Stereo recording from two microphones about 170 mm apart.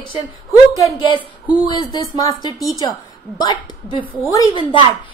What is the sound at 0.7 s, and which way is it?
A woman's voice, 20° left (ahead or behind).